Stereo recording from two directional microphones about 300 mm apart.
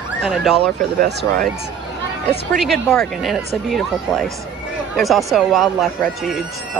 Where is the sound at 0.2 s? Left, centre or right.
Centre.